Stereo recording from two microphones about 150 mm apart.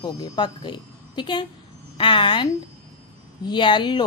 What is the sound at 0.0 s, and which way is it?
A woman's voice, 30° left (ahead or behind).